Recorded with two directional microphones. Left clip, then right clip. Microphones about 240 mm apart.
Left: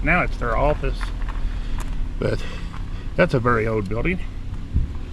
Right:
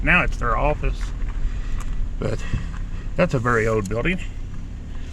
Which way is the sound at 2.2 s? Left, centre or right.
Centre.